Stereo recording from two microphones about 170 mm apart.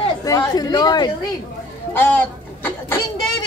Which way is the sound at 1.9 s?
10° left (ahead or behind).